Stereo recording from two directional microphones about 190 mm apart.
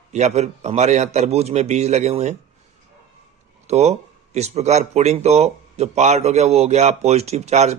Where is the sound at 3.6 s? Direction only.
35° right (ahead or behind).